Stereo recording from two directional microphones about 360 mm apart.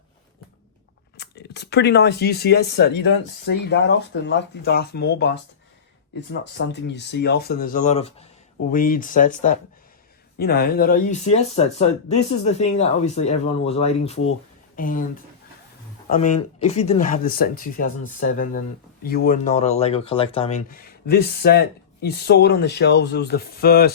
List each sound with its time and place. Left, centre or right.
1.1 s speech: left
6.4 s speech: left
16.0 s speech: left